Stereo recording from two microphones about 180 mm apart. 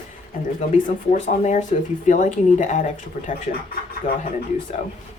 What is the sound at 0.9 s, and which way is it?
Speech, 45° left (ahead or behind).